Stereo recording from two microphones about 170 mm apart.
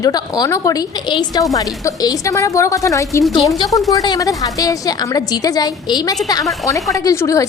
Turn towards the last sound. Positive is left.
turn(degrees=20)  # may be behind; listen again after turning